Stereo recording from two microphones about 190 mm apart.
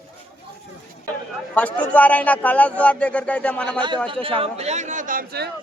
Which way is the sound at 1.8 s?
5° left (ahead or behind).